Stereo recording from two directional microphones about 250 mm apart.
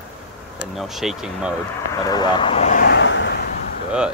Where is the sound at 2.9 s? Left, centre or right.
Left.